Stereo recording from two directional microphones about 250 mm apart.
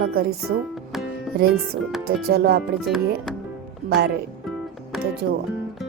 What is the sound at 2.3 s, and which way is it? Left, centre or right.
Speech, right.